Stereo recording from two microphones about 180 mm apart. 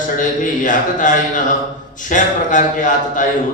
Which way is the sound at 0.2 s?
45° left (ahead or behind).